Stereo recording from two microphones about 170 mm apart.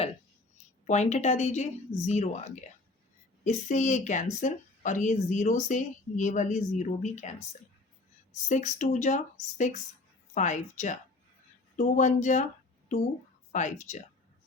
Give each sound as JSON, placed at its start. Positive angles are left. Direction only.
{"t": 0.9, "sound": "a woman's voice", "side_deg": 45}
{"t": 8.4, "sound": "a woman's voice", "side_deg": 45}
{"t": 13.5, "sound": "a woman's voice", "side_deg": 45}